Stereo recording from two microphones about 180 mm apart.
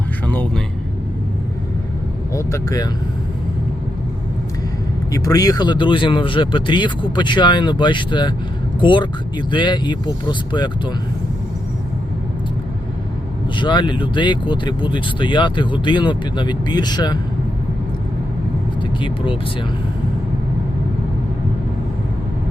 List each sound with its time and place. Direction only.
0.3 s vehicle: 10° left (ahead or behind)
2.3 s speech: 15° left (ahead or behind)
5.1 s speech: 20° left (ahead or behind)
13.6 s speech: 25° left (ahead or behind)
18.8 s speech: 25° left (ahead or behind)